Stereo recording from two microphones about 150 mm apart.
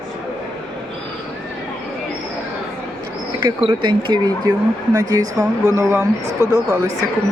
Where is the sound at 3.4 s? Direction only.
30° right (ahead or behind); by 6.0 s 15° right (ahead or behind).